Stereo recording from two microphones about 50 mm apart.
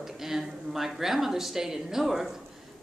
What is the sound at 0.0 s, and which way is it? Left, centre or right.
A woman's voice, centre.